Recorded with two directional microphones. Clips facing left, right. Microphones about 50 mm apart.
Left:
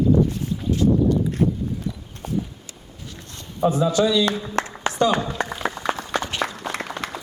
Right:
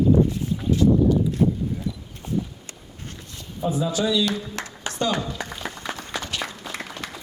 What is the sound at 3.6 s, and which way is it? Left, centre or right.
Speech, left.